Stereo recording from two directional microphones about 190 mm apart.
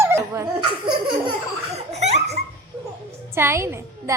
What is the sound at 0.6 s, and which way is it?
Laughter, 25° right (ahead or behind).